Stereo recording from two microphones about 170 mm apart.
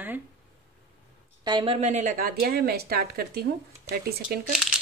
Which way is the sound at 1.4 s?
30° right (ahead or behind).